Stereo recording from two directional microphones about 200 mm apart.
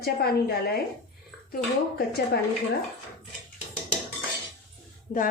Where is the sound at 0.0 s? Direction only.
50° left (ahead or behind).